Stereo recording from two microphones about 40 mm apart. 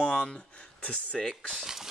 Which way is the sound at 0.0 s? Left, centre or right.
Left.